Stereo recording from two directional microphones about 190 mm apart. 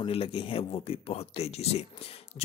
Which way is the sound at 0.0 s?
30° left (ahead or behind).